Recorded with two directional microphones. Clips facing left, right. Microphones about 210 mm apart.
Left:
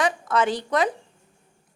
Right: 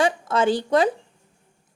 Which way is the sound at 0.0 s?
30° right (ahead or behind).